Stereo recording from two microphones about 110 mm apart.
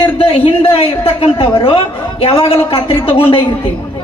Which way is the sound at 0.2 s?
60° left (ahead or behind).